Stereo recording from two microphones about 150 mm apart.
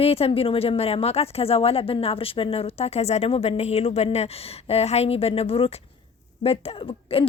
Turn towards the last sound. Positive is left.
turn(degrees=40)  # may be behind; listen again after turning